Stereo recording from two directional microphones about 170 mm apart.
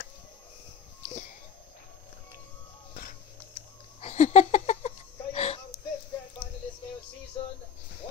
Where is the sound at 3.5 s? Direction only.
40° left (ahead or behind).